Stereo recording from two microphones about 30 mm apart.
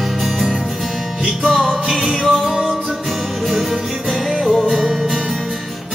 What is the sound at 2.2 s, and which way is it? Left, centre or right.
Music, centre.